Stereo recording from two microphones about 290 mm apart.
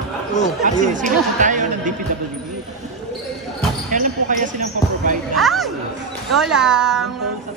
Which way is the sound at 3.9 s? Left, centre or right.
Right.